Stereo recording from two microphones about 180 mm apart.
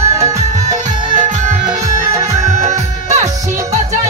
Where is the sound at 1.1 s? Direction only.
45° right (ahead or behind).